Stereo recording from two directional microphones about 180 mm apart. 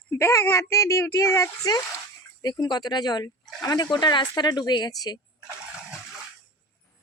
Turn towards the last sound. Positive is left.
turn(degrees=20)  # may be behind; listen again after turning